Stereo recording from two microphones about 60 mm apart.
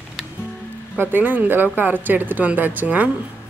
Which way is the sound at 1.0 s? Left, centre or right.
Right.